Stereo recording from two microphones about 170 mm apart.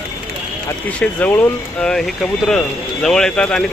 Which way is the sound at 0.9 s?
10° left (ahead or behind).